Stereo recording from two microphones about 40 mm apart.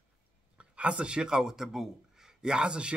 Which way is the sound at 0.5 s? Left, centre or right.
Right.